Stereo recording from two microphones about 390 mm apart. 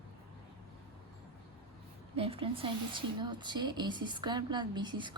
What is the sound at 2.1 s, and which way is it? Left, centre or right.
A woman's voice, centre.